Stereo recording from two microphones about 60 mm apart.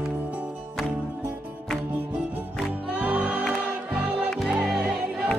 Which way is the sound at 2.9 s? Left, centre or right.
Centre.